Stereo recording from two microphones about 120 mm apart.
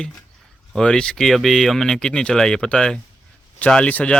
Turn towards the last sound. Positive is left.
turn(degrees=10)  # may be behind; listen again after turning